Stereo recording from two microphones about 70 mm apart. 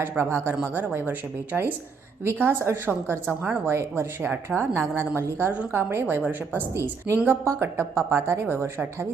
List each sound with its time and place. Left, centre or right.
0.2 s a woman's voice: right
1.5 s speech: centre
2.4 s a woman's voice: right
3.7 s a woman's voice: right